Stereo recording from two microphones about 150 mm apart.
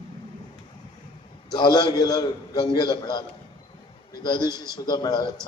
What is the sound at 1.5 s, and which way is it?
A man's voice, 30° left (ahead or behind).